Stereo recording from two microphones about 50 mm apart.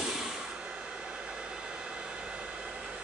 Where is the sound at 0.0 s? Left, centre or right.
Centre.